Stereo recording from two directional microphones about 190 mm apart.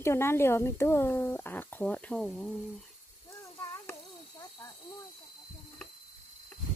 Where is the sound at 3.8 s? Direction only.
15° left (ahead or behind).